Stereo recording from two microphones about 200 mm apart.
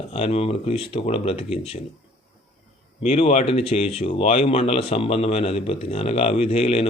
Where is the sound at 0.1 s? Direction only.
30° left (ahead or behind).